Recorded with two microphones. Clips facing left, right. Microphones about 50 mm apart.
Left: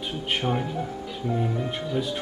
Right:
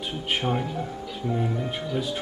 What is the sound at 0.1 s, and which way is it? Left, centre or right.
Speech, centre.